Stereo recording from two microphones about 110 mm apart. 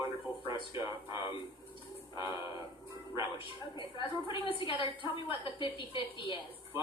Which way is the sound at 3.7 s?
50° left (ahead or behind).